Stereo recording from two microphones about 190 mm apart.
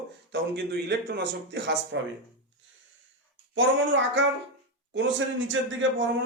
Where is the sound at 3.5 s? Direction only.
75° right (ahead or behind).